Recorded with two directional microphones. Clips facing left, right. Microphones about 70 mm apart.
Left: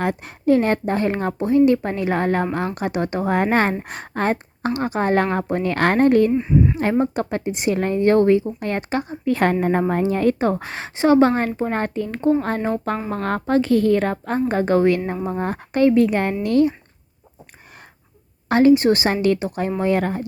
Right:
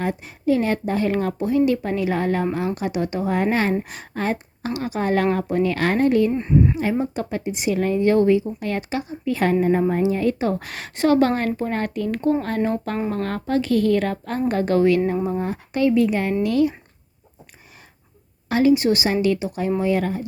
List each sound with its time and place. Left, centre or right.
0.0 s speech: left
6.3 s speech: centre
7.0 s speech: left
10.5 s a woman's voice: left
15.4 s a woman's voice: left
18.4 s speech: left